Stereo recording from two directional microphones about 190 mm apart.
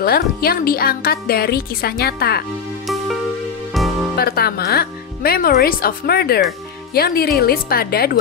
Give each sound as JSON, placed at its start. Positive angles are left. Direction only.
{"t": 0.0, "sound": "speech", "side_deg": 50}
{"t": 3.7, "sound": "music", "side_deg": 0}
{"t": 4.2, "sound": "speech", "side_deg": 55}